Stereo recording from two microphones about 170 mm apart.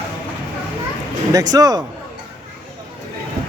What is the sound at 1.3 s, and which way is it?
Speech, 20° right (ahead or behind).